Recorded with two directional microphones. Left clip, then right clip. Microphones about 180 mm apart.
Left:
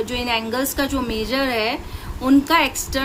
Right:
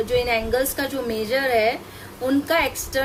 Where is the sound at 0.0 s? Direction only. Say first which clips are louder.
Right 1 dB; 40° left (ahead or behind).